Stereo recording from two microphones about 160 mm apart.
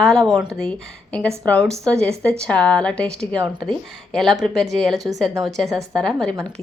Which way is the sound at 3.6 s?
5° left (ahead or behind).